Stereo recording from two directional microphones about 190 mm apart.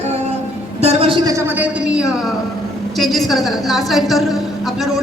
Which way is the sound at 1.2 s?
15° right (ahead or behind).